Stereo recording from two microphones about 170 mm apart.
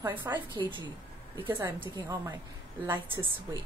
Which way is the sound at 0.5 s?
25° right (ahead or behind).